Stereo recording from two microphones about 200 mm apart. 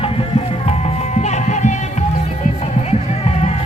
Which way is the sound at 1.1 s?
35° left (ahead or behind).